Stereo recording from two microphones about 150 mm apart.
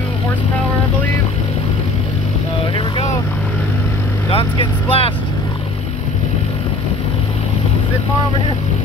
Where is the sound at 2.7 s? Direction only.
40° left (ahead or behind).